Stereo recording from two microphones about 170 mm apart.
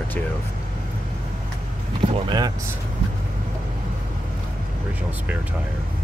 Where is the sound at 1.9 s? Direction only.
25° right (ahead or behind).